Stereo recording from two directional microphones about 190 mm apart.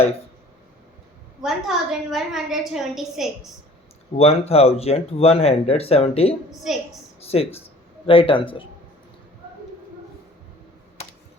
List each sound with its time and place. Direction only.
1.4 s a woman's voice: centre (ahead or behind)
4.2 s speech: 30° left (ahead or behind)